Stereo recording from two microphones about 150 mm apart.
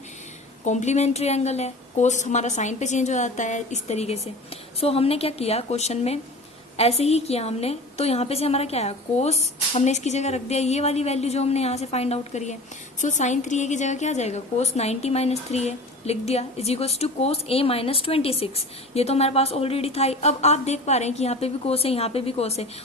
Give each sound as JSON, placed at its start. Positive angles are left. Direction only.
{"t": 0.6, "sound": "a woman's voice", "side_deg": 50}